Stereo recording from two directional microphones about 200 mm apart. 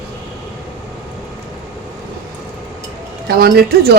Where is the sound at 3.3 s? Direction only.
50° right (ahead or behind).